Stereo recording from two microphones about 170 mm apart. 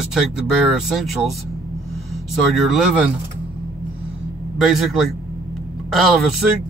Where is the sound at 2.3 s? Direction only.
Centre (ahead or behind).